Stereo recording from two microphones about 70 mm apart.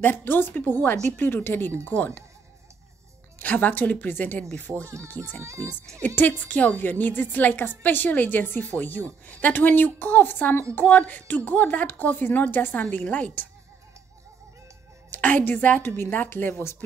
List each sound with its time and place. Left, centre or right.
0.0 s a woman's voice: left
3.3 s a woman's voice: left
5.4 s speech: right
6.0 s a woman's voice: left
15.0 s a woman's voice: left